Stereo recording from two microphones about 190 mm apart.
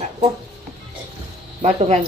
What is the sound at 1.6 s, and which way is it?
Speech, 40° right (ahead or behind).